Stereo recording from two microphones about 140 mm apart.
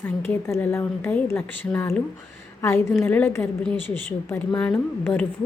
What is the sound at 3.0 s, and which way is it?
A woman's voice, 10° left (ahead or behind).